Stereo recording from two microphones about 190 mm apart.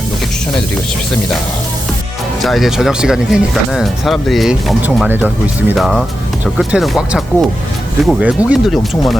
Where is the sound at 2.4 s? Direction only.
Centre (ahead or behind).